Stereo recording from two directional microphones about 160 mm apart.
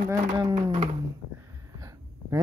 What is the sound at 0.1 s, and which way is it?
Speech, 25° right (ahead or behind).